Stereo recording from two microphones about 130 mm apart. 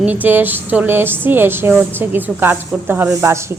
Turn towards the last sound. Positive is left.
turn(degrees=-20)  # may be behind; listen again after turning